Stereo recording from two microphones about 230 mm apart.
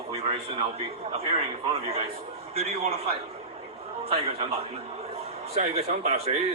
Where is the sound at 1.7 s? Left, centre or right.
Right.